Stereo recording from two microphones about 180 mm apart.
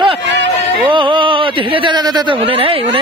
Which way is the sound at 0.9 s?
25° right (ahead or behind).